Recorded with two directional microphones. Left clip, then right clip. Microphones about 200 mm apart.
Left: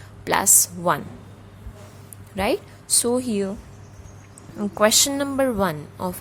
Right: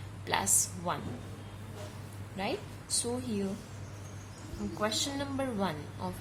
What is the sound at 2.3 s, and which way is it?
A woman's voice, 50° left (ahead or behind).